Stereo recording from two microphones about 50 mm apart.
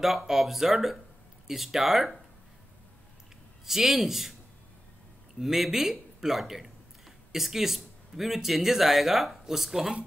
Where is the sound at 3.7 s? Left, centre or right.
Centre.